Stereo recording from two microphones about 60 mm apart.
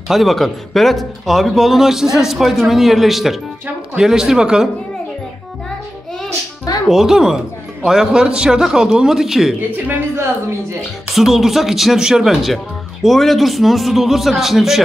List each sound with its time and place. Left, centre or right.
0.1 s a man's voice: centre
6.9 s a man's voice: centre
9.6 s speech: right
11.1 s speech: centre